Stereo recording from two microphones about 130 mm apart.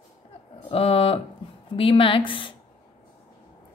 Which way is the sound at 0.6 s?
45° left (ahead or behind).